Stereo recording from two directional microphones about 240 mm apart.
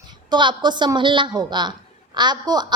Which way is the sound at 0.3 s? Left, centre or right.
Centre.